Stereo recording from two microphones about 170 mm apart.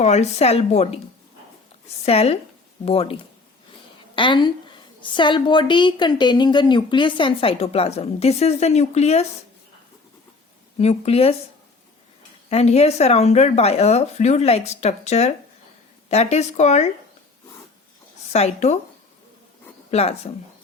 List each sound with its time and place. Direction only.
0.0 s speech: 40° left (ahead or behind)
2.0 s a woman's voice: 35° left (ahead or behind)
10.8 s speech: 40° left (ahead or behind)
12.5 s speech: 40° left (ahead or behind)
18.3 s speech: 40° left (ahead or behind)
19.9 s speech: 35° left (ahead or behind)